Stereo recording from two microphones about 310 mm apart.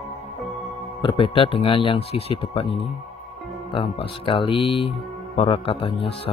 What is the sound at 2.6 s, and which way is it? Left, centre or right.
Speech, centre.